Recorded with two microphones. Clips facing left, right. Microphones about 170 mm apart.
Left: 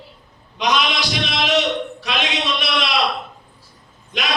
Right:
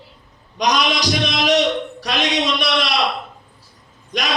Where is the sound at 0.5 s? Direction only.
40° right (ahead or behind).